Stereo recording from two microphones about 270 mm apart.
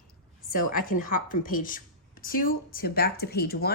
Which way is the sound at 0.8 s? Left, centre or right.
Left.